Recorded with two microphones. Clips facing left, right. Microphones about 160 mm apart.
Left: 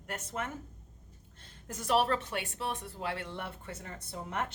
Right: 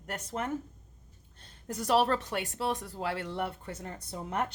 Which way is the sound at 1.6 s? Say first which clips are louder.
Right 2 dB; 35° right (ahead or behind).